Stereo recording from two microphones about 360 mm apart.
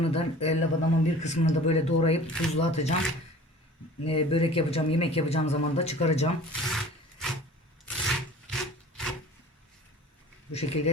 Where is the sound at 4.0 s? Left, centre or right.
Centre.